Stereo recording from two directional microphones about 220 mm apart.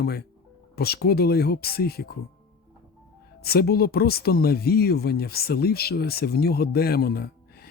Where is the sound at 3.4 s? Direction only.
45° left (ahead or behind).